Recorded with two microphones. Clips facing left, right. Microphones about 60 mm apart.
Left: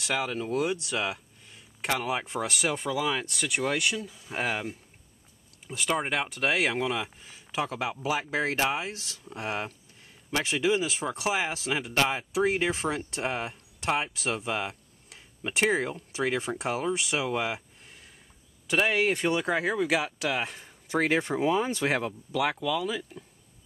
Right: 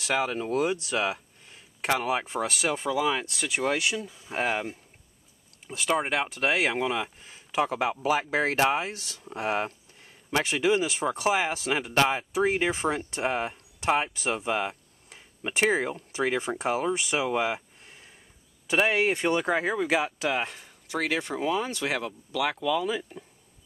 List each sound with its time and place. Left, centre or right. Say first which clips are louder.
0.0 s speech: right 2 dB; centre
20.9 s speech: left 3 dB; left
21.4 s speech: left 1 dB; centre
21.6 s speech: left 2 dB; left
22.3 s speech: even; centre
22.6 s speech: right 2 dB; centre